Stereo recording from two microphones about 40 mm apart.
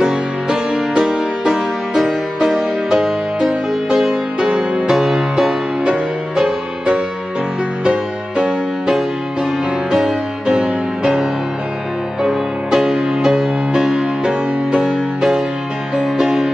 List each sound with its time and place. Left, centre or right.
0.0 s music: centre